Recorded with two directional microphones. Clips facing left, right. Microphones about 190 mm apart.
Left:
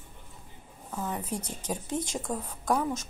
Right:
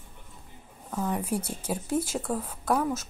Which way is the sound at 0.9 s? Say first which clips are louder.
Right 5 dB; 5° right (ahead or behind).